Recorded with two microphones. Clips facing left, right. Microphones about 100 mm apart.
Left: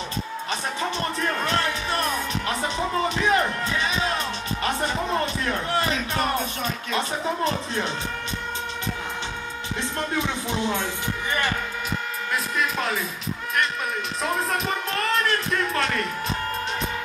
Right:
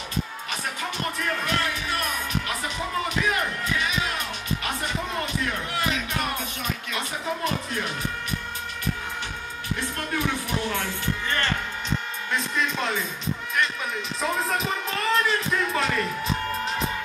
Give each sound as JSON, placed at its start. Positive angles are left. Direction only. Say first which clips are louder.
{"t": 1.2, "sound": "music", "louder": "left 2 dB", "side_deg": 30}
{"t": 4.6, "sound": "speech", "louder": "left 7 dB", "side_deg": 35}
{"t": 9.9, "sound": "speech", "louder": "left 2 dB", "side_deg": 20}
{"t": 12.5, "sound": "speech", "louder": "left 1 dB", "side_deg": 0}
{"t": 14.4, "sound": "speech", "louder": "left 1 dB", "side_deg": 0}